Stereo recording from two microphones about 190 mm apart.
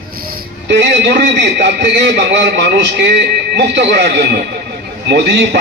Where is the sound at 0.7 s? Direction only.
65° right (ahead or behind).